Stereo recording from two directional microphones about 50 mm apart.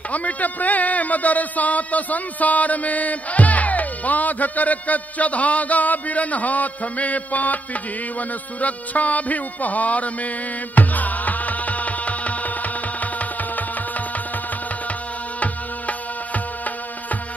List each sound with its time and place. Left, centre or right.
0.1 s a man's voice: left
10.7 s music: left